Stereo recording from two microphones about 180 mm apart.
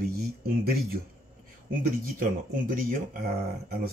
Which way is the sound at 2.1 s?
50° right (ahead or behind).